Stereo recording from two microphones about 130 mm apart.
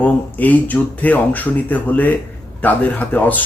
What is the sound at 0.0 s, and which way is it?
Speech, 10° left (ahead or behind).